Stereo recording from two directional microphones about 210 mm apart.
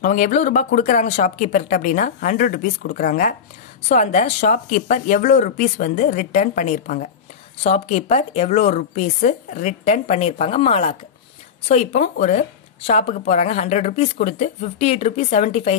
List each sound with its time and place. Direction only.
0.0 s a woman's voice: 35° left (ahead or behind)